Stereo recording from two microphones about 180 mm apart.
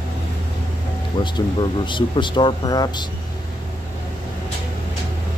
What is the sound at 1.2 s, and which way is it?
Speech, 25° left (ahead or behind).